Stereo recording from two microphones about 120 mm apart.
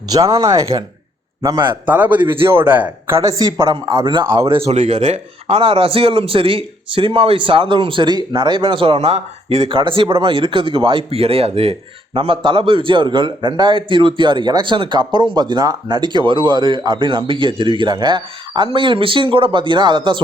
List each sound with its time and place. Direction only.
0.1 s a man's voice: 30° right (ahead or behind)
1.9 s a man's voice: 15° right (ahead or behind); by 4.7 s 50° right (ahead or behind)
4.7 s a man's voice: 70° right (ahead or behind); by 20.2 s 40° right (ahead or behind)